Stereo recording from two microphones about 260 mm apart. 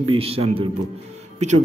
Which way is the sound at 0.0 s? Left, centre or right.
Right.